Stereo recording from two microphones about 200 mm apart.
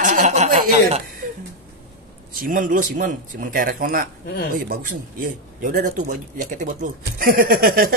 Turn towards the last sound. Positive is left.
turn(degrees=-45)  # may be behind; listen again after turning